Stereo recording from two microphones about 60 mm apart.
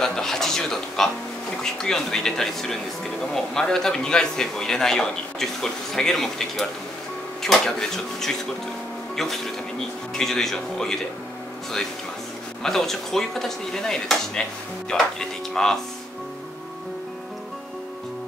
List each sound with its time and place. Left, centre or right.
0.0 s speech: centre
12.6 s speech: centre